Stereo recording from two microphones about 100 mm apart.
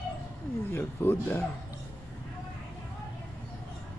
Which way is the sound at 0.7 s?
25° left (ahead or behind).